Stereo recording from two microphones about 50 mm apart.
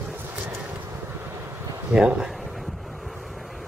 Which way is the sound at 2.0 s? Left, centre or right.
Centre.